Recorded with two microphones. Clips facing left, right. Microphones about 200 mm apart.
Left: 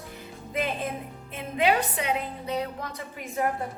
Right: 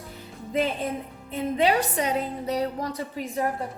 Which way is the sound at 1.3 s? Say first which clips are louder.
Right 2 dB; 40° right (ahead or behind).